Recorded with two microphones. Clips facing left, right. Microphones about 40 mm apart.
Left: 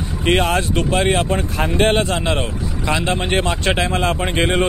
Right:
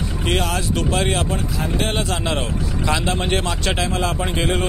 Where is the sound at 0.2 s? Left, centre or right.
Left.